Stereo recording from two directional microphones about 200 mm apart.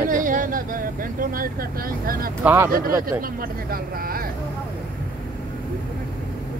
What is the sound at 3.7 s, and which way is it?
Speech, 45° right (ahead or behind).